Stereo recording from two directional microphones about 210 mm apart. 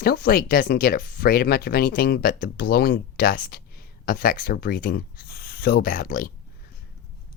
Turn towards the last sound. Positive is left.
turn(degrees=45)  # may be behind; listen again after turning